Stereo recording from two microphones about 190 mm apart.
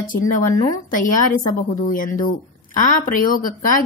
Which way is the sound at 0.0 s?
45° left (ahead or behind).